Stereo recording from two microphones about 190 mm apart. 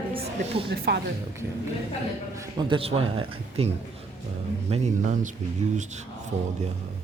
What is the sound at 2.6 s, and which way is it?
Speech, 25° right (ahead or behind).